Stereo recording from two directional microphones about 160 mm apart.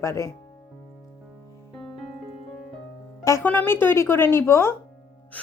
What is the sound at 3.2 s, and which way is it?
A woman's voice, 15° left (ahead or behind).